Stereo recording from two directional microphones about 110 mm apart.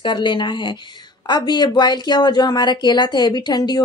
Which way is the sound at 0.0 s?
45° left (ahead or behind).